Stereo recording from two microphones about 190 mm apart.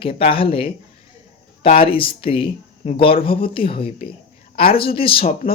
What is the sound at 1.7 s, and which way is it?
Speech, 30° left (ahead or behind).